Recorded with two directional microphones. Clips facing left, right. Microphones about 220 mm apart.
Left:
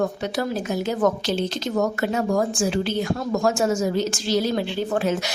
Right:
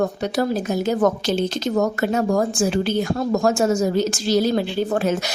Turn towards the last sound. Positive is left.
turn(degrees=-40)  # may be behind; listen again after turning